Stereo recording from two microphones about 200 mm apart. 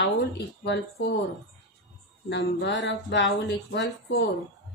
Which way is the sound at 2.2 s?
60° left (ahead or behind).